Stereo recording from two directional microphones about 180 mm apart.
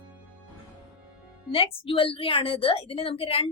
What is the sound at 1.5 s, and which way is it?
A woman's voice, 30° left (ahead or behind).